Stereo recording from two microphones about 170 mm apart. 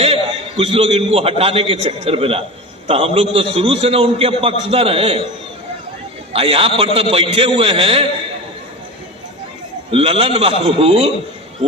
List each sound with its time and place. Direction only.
0.0 s a man's voice: 35° right (ahead or behind)
6.3 s a man's voice: 35° right (ahead or behind)
9.9 s a man's voice: 35° right (ahead or behind)